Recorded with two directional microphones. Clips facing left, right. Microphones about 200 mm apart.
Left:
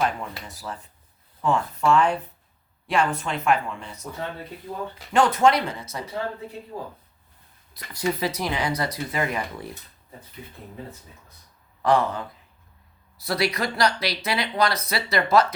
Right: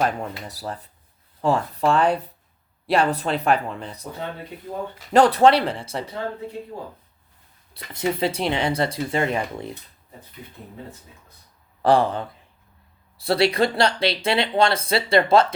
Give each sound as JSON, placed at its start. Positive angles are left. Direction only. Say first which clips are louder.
{"t": 0.0, "sound": "speech", "louder": "right 2 dB", "side_deg": -40}
{"t": 5.1, "sound": "speech", "louder": "right 4 dB", "side_deg": -35}
{"t": 7.7, "sound": "speech", "louder": "right 2 dB", "side_deg": -25}
{"t": 11.8, "sound": "speech", "louder": "right 3 dB", "side_deg": -30}